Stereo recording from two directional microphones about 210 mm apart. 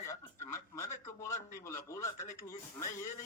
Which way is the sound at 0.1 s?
15° left (ahead or behind).